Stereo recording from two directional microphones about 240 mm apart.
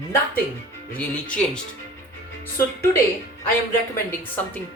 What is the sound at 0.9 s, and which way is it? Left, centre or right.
A man's voice, centre.